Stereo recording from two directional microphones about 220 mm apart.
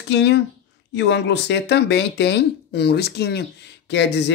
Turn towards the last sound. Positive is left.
turn(degrees=50)  # may be behind; listen again after turning